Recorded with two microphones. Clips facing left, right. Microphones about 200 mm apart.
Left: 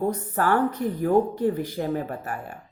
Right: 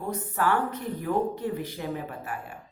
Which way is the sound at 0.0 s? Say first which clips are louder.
Left 4 dB; 40° left (ahead or behind).